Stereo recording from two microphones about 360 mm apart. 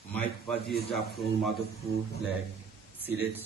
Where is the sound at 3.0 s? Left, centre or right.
Centre.